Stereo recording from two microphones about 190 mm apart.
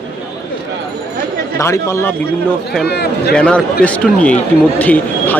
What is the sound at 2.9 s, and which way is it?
Speech, 60° left (ahead or behind).